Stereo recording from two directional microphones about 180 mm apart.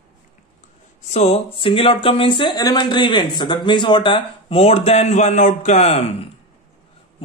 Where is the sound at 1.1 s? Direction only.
35° left (ahead or behind).